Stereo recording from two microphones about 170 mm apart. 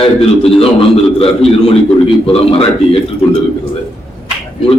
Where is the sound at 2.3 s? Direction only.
35° left (ahead or behind).